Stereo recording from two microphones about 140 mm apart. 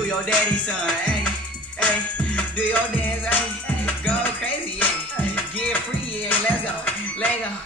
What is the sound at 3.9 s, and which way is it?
Music, 15° left (ahead or behind).